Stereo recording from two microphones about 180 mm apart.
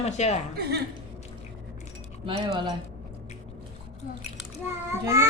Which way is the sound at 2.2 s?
30° right (ahead or behind).